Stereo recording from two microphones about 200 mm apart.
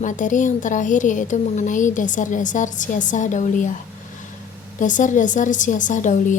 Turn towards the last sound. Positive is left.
turn(degrees=40)  # may be behind; listen again after turning